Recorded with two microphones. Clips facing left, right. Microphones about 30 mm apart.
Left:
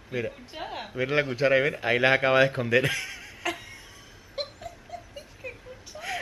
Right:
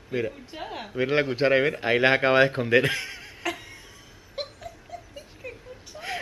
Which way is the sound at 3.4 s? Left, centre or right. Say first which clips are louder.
Even; centre.